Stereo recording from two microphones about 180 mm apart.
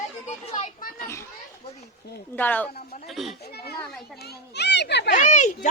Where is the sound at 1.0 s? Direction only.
15° left (ahead or behind).